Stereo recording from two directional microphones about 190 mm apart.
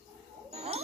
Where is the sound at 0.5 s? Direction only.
35° right (ahead or behind).